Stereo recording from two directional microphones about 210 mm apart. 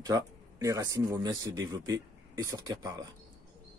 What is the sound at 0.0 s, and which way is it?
Speech, 15° right (ahead or behind).